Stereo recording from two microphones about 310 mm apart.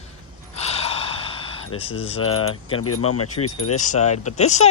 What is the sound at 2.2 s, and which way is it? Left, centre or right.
Speech, left.